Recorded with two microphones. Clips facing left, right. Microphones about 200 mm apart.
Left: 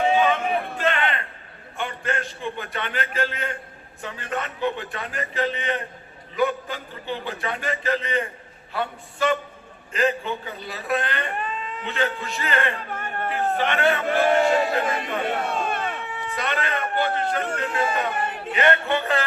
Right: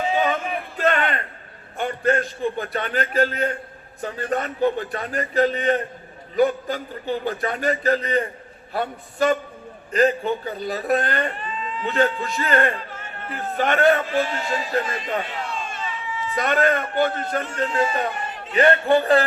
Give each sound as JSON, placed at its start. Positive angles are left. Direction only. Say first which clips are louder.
{"t": 0.8, "sound": "a sound", "louder": "right 3 dB", "side_deg": -40}
{"t": 1.8, "sound": "a man's voice", "louder": "right 7 dB", "side_deg": -40}
{"t": 11.3, "sound": "cat", "louder": "even", "side_deg": 55}
{"t": 11.9, "sound": "speech", "louder": "right 5 dB", "side_deg": -40}
{"t": 12.7, "sound": "a sound", "louder": "left 3 dB", "side_deg": 55}
{"t": 13.3, "sound": "a man's voice", "louder": "right 2 dB", "side_deg": -45}
{"t": 14.0, "sound": "a man's voice", "louder": "left 5 dB", "side_deg": 60}
{"t": 16.4, "sound": "speech", "louder": "right 7 dB", "side_deg": -45}
{"t": 17.7, "sound": "speech", "louder": "right 3 dB", "side_deg": 55}
{"t": 18.1, "sound": "a sound", "louder": "left 4 dB", "side_deg": 55}
{"t": 18.5, "sound": "a man's voice", "louder": "right 5 dB", "side_deg": -35}